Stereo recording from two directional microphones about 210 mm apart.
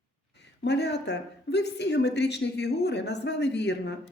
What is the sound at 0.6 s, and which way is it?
A woman's voice, 55° left (ahead or behind).